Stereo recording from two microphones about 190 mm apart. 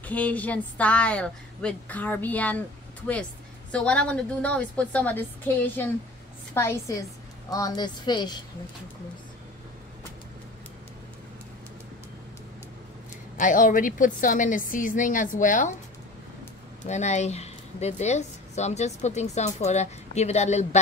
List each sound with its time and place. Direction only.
0.0 s a woman's voice: 10° left (ahead or behind)
3.7 s a woman's voice: 5° left (ahead or behind); by 8.4 s 20° left (ahead or behind)
13.4 s a woman's voice: 45° left (ahead or behind)
16.8 s a woman's voice: 35° left (ahead or behind)